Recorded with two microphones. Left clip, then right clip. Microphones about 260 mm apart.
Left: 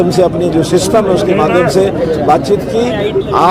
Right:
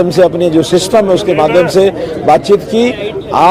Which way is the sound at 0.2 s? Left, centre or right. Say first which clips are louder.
Right 2 dB; right.